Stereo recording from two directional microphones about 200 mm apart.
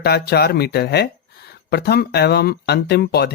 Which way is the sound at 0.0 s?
55° left (ahead or behind).